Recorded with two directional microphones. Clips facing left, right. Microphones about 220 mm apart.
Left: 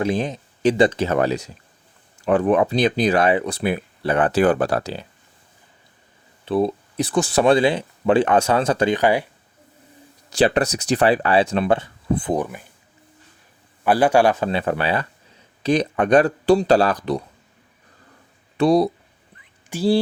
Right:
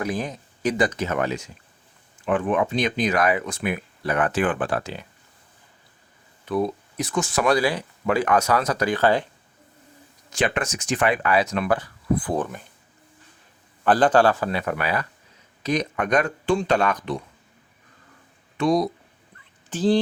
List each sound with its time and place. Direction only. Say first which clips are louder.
0.0 s speech: left 5 dB; 25° left (ahead or behind)
6.4 s speech: left 4 dB; 30° left (ahead or behind)
9.0 s speech: left 2 dB; 15° left (ahead or behind)
10.3 s speech: left 7 dB; 35° left (ahead or behind)
12.4 s speech: left 2 dB; 10° left (ahead or behind)
13.8 s speech: left 2 dB; 10° left (ahead or behind); by 17.2 s 35° left (ahead or behind)
18.5 s speech: left 5 dB; 35° left (ahead or behind)
19.4 s a sound: left 1 dB; 10° left (ahead or behind)